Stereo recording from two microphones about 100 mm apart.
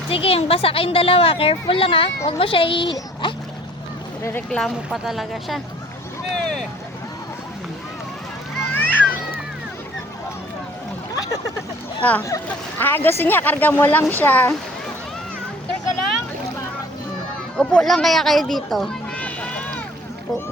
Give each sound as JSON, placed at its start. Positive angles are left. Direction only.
{"t": 0.1, "sound": "a child's voice", "side_deg": 75}
{"t": 4.2, "sound": "speech", "side_deg": 25}
{"t": 4.4, "sound": "speech", "side_deg": 5}
{"t": 8.7, "sound": "a sound", "side_deg": 20}
{"t": 12.0, "sound": "speech", "side_deg": 15}
{"t": 17.6, "sound": "speech", "side_deg": 5}
{"t": 19.1, "sound": "rowboat", "side_deg": 15}